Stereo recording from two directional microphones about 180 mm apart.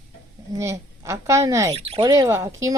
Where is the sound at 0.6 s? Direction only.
15° right (ahead or behind).